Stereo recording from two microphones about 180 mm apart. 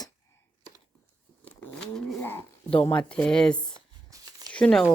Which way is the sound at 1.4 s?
5° left (ahead or behind).